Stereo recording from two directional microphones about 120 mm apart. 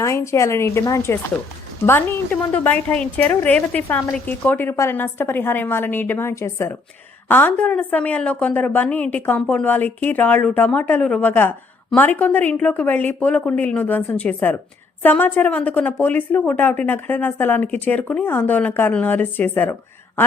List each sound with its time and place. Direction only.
0.0 s speech: 25° left (ahead or behind)